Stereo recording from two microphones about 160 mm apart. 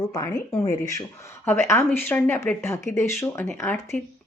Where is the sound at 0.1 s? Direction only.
20° left (ahead or behind).